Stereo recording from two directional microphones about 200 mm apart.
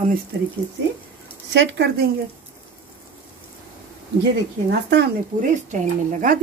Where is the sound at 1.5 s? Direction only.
60° right (ahead or behind).